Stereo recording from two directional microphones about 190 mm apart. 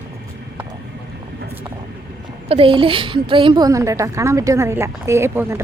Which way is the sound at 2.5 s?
30° right (ahead or behind).